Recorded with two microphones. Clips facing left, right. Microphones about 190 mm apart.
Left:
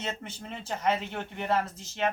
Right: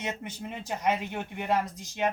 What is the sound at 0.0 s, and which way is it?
Speech, 15° right (ahead or behind).